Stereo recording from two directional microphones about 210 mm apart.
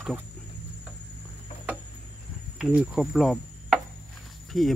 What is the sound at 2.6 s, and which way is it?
Insect, 5° right (ahead or behind).